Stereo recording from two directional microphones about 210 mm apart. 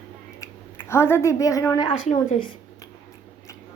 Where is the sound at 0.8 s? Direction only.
10° left (ahead or behind).